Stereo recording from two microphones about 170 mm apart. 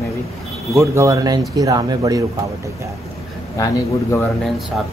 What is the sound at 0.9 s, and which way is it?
Speech, 20° right (ahead or behind).